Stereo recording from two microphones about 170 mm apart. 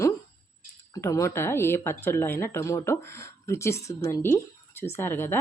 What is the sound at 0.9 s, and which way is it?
Speech, 15° left (ahead or behind).